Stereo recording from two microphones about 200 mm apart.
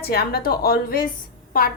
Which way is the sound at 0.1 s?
50° left (ahead or behind).